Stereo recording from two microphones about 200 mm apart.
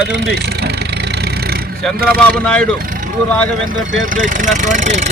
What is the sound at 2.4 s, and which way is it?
Speech, 5° left (ahead or behind).